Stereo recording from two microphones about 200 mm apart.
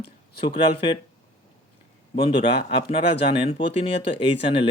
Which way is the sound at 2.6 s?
25° left (ahead or behind).